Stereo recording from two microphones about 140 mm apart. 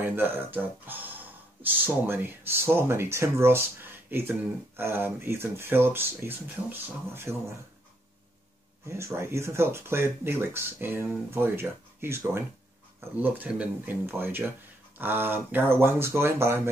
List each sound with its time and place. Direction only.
0.0 s speech: 15° right (ahead or behind)
8.8 s speech: 20° right (ahead or behind)